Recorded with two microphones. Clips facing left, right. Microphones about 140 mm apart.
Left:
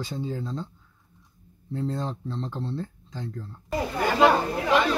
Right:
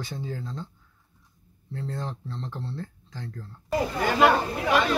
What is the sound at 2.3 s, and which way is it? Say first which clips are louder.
Speech: left 4 dB; 20° left (ahead or behind).